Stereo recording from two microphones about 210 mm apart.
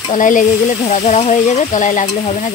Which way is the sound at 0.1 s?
40° left (ahead or behind).